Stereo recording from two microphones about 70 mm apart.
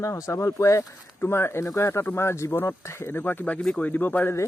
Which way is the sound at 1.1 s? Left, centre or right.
Left.